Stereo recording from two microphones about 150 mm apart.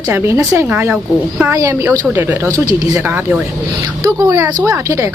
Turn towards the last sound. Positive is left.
turn(degrees=-20)  # may be behind; listen again after turning